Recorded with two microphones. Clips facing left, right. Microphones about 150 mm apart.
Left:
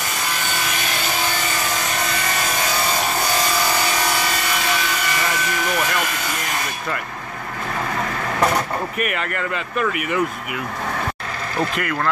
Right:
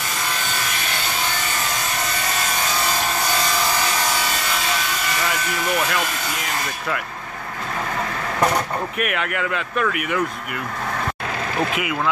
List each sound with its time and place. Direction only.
8.9 s speech: centre (ahead or behind)
11.7 s speech: 5° right (ahead or behind)